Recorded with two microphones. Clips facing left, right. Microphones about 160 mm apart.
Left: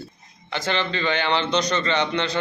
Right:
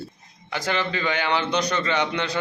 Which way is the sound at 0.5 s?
10° right (ahead or behind).